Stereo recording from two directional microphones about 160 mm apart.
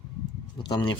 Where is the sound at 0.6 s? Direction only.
30° left (ahead or behind).